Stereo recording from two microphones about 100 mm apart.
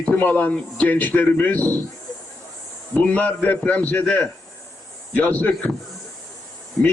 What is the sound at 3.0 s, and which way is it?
A man's voice, 15° left (ahead or behind).